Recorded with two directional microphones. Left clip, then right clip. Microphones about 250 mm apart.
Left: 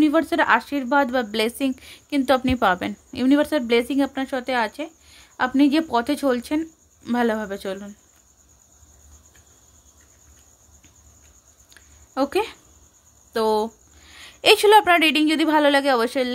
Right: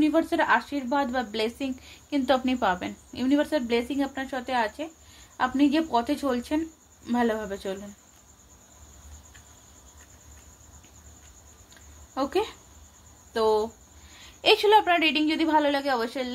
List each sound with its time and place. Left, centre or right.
0.0 s speech: left
11.7 s a sound: left
13.3 s a woman's voice: left